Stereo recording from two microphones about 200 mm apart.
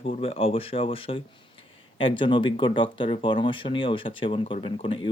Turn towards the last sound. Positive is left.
turn(degrees=25)  # may be behind; listen again after turning